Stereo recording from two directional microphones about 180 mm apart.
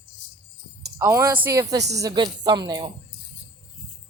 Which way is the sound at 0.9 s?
15° right (ahead or behind).